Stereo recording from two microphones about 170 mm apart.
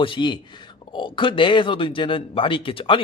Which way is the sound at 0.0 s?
30° left (ahead or behind).